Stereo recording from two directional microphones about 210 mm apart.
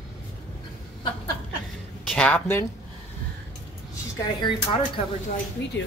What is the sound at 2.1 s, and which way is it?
Speech, 5° left (ahead or behind).